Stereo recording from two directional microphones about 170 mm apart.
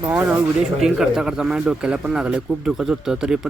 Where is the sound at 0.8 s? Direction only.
Centre (ahead or behind).